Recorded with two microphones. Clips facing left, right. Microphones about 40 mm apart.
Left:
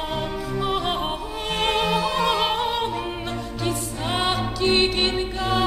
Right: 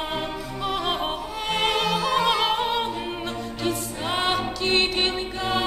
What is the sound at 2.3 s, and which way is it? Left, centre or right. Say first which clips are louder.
Music: even; centre.